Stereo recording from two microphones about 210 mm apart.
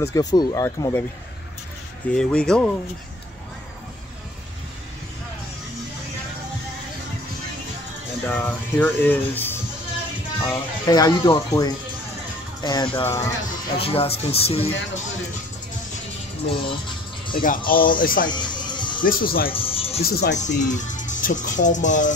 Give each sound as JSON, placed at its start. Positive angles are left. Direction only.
{"t": 0.0, "sound": "speech", "side_deg": 15}
{"t": 2.1, "sound": "speech", "side_deg": 5}
{"t": 8.3, "sound": "speech", "side_deg": 10}
{"t": 13.7, "sound": "speech", "side_deg": 25}
{"t": 16.4, "sound": "speech", "side_deg": 25}
{"t": 17.3, "sound": "speech", "side_deg": 40}
{"t": 18.3, "sound": "music", "side_deg": 20}
{"t": 19.0, "sound": "speech", "side_deg": 45}
{"t": 19.5, "sound": "music", "side_deg": 25}
{"t": 20.0, "sound": "speech", "side_deg": 45}